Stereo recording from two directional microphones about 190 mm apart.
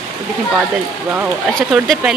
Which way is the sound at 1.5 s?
Centre (ahead or behind).